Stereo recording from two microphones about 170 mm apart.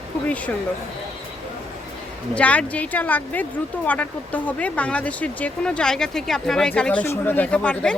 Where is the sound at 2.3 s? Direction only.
10° left (ahead or behind).